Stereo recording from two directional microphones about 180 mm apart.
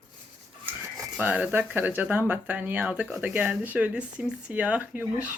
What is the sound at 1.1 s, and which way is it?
Speech, 10° right (ahead or behind).